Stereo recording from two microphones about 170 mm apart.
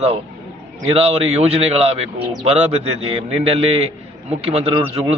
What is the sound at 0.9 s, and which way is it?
A man's voice, 35° right (ahead or behind).